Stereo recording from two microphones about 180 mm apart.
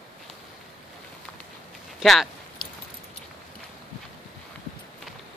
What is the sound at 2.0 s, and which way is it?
Speech, centre (ahead or behind).